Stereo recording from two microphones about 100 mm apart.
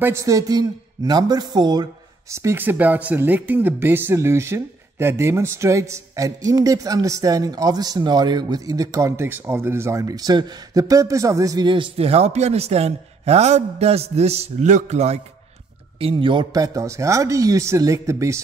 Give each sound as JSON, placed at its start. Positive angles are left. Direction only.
{"t": 0.0, "sound": "speech", "side_deg": -30}
{"t": 2.3, "sound": "speech", "side_deg": -25}
{"t": 11.6, "sound": "a man's voice", "side_deg": -55}
{"t": 12.0, "sound": "a man's voice", "side_deg": -90}
{"t": 16.0, "sound": "a man's voice", "side_deg": -60}
{"t": 16.5, "sound": "speech", "side_deg": -35}